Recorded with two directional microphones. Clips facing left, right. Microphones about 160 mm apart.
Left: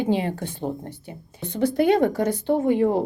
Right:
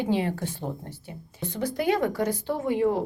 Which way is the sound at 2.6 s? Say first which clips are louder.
Left 3 dB; 50° left (ahead or behind).